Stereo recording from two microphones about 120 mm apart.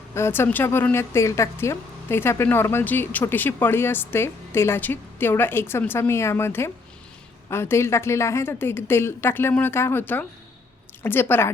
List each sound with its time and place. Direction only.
0.1 s a woman's voice: 20° left (ahead or behind)